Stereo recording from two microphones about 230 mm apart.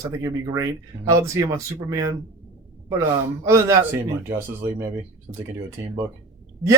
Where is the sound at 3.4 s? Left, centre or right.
Centre.